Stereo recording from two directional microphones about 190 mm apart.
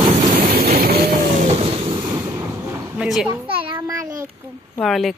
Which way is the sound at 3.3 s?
20° right (ahead or behind).